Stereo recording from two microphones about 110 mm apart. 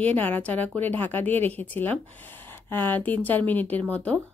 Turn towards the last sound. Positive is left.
turn(degrees=15)  # may be behind; listen again after turning